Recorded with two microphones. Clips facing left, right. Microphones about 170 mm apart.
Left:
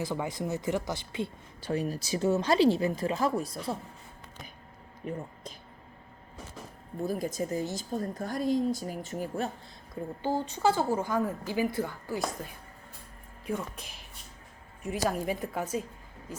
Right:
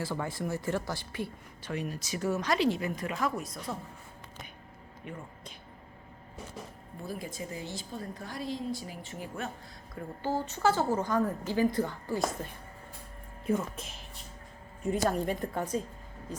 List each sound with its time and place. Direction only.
0.0 s speech: 15° left (ahead or behind)
1.7 s speech: 35° left (ahead or behind)
5.0 s speech: 35° left (ahead or behind)
7.0 s a woman's voice: 40° left (ahead or behind)
9.9 s a woman's voice: 15° left (ahead or behind)